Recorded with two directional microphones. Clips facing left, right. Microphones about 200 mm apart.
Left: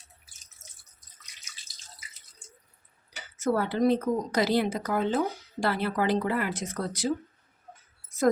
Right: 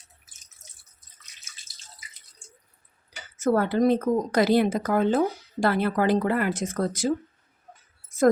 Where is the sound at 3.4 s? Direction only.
50° right (ahead or behind).